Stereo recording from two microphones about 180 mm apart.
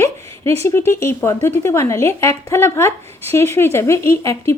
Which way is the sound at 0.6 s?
15° left (ahead or behind).